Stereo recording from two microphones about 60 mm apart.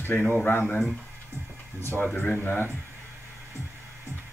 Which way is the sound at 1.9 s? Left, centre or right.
Left.